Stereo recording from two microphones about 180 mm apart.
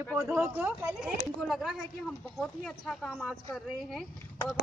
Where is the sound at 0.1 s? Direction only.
5° right (ahead or behind).